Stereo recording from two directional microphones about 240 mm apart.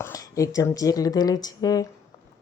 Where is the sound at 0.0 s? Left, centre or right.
Centre.